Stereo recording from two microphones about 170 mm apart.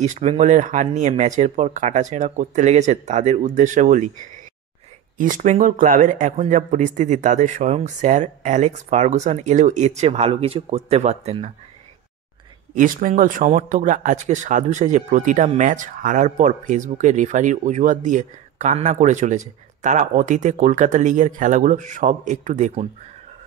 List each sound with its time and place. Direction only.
0.0 s speech: 45° right (ahead or behind)
5.1 s speech: 50° right (ahead or behind)
12.7 s speech: 50° right (ahead or behind)